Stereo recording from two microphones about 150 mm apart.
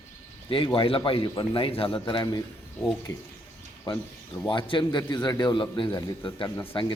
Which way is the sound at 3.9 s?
30° left (ahead or behind).